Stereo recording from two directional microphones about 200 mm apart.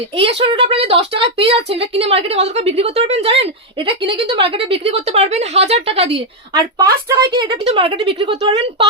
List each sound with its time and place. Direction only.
0.1 s a woman's voice: 30° right (ahead or behind)
6.5 s a woman's voice: 20° right (ahead or behind)